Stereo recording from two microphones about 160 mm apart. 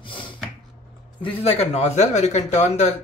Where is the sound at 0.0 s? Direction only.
30° left (ahead or behind).